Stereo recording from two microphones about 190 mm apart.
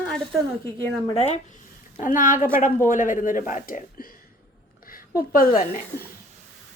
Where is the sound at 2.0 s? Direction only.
45° left (ahead or behind).